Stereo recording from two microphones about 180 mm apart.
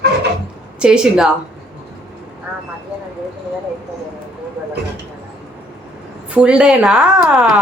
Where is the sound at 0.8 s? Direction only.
5° right (ahead or behind).